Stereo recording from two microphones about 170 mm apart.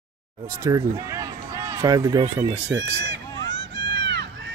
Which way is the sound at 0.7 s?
20° right (ahead or behind).